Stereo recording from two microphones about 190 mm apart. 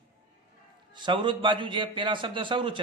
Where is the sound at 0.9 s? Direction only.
25° right (ahead or behind).